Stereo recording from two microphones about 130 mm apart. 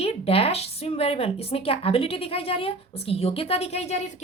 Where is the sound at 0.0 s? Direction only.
50° left (ahead or behind).